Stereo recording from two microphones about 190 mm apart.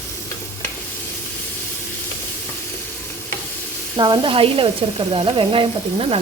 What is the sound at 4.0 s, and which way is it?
Sizzle, 25° right (ahead or behind).